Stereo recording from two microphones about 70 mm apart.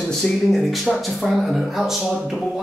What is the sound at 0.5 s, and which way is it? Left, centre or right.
Speech, centre.